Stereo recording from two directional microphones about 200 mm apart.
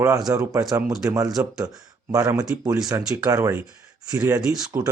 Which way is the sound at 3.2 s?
15° right (ahead or behind).